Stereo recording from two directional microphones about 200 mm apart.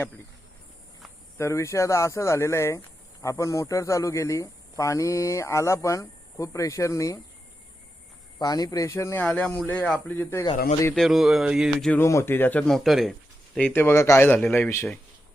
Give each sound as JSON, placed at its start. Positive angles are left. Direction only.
{"t": 1.4, "sound": "speech", "side_deg": 15}
{"t": 8.4, "sound": "speech", "side_deg": 20}
{"t": 10.9, "sound": "a sound", "side_deg": 0}
{"t": 11.9, "sound": "speech", "side_deg": 15}